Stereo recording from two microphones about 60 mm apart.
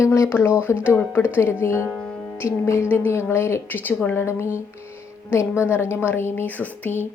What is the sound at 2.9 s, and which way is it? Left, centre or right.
Speech, left.